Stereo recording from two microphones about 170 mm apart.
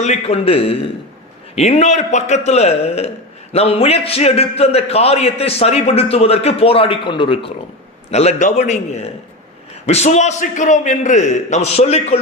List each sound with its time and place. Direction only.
0.0 s a man's voice: 40° left (ahead or behind)